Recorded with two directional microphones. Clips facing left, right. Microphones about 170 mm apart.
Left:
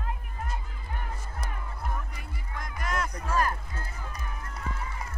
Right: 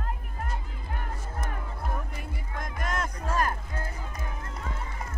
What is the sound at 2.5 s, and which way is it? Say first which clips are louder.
Speech: even; 50° right (ahead or behind).